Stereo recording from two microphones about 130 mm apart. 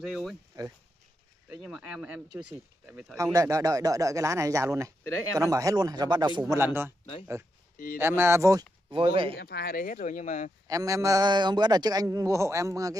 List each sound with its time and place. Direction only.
0.0 s speech: 5° right (ahead or behind)
1.7 s speech: 5° right (ahead or behind)
3.2 s a man's voice: 25° right (ahead or behind)
6.5 s speech: 20° right (ahead or behind)
7.7 s a sound: 90° left
8.0 s a man's voice: 15° right (ahead or behind)
8.9 s speech: 45° right (ahead or behind)
9.8 s speech: 90° left
10.7 s a man's voice: 25° right (ahead or behind)